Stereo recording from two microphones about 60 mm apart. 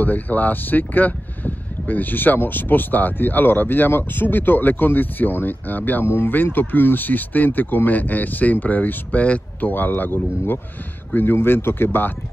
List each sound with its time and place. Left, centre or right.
0.0 s speech: left